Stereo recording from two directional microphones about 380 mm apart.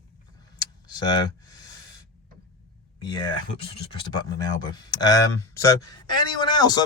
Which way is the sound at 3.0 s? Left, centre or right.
Centre.